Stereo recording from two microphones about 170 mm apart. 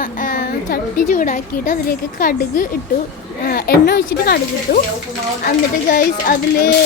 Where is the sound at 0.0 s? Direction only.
50° left (ahead or behind); by 4.8 s 70° left (ahead or behind).